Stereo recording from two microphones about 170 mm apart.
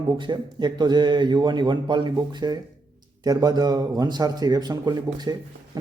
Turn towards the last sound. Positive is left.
turn(degrees=-25)  # may be behind; listen again after turning